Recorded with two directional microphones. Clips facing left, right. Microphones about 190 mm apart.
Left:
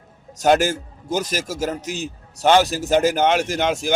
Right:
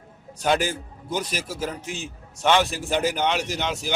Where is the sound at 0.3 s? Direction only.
45° left (ahead or behind).